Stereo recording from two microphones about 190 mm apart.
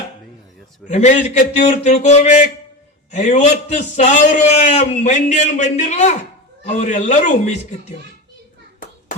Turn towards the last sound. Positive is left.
turn(degrees=40)  # may be behind; listen again after turning